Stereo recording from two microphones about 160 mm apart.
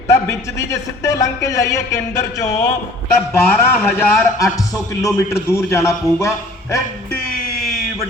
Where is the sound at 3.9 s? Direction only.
20° left (ahead or behind).